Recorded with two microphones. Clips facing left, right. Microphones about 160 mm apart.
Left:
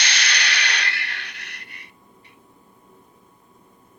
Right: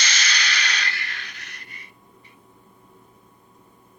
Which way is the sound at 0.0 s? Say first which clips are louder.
Left 1 dB; 65° left (ahead or behind).